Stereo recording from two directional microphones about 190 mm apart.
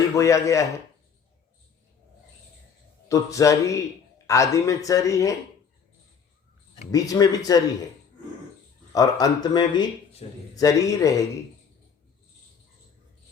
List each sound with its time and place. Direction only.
0.2 s speech: 15° left (ahead or behind)
3.1 s speech: 15° left (ahead or behind)
6.9 s speech: 20° left (ahead or behind)
9.0 s speech: 20° left (ahead or behind)